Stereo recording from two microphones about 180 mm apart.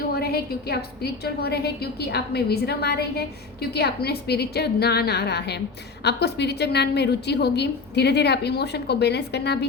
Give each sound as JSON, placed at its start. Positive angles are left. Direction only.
{"t": 0.1, "sound": "a woman's voice", "side_deg": 60}